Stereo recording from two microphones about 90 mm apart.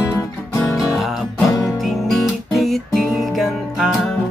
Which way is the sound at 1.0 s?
Centre (ahead or behind).